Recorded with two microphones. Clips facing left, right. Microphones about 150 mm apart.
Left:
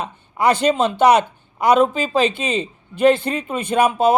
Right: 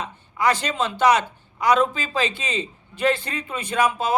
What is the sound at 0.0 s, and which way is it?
Speech, 60° left (ahead or behind).